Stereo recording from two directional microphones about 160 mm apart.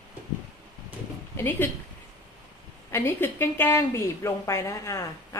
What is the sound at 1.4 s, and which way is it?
Speech, 15° left (ahead or behind).